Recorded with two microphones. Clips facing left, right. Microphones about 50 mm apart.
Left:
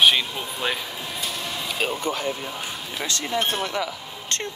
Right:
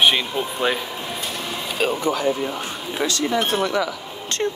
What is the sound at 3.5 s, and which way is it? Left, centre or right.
Speech, right.